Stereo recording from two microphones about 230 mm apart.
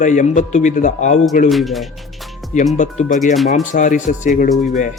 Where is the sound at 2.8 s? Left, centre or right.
Left.